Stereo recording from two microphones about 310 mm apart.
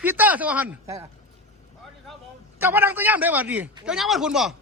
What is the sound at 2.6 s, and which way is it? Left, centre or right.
A man's voice, centre.